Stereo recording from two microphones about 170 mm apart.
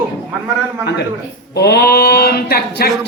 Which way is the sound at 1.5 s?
70° left (ahead or behind).